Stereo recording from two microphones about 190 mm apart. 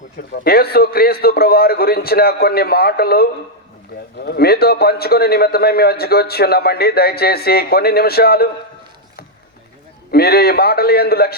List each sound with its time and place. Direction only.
0.4 s a man's voice: 55° left (ahead or behind)
10.1 s a man's voice: 55° left (ahead or behind)